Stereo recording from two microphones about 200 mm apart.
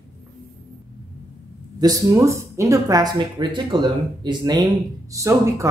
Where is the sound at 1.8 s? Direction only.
15° right (ahead or behind).